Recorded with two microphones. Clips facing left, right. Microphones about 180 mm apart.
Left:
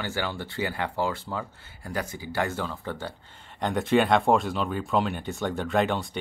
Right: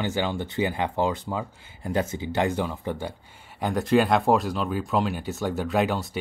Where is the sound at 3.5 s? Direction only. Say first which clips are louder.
Right 1 dB; centre (ahead or behind).